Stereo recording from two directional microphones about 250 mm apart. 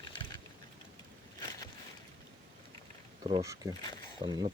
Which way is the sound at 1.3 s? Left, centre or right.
Centre.